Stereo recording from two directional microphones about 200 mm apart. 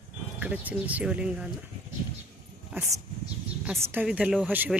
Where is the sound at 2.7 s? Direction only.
5° right (ahead or behind).